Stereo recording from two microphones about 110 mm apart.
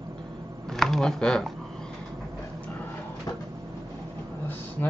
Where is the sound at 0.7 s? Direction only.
5° left (ahead or behind).